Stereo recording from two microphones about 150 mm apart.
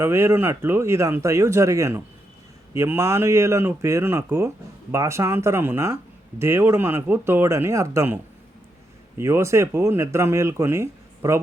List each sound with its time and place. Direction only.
0.0 s speech: 15° right (ahead or behind)